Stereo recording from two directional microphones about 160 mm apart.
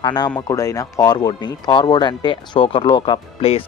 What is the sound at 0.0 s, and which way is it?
Speech, 30° left (ahead or behind).